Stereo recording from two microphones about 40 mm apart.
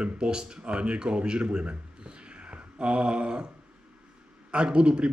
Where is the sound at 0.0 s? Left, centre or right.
Right.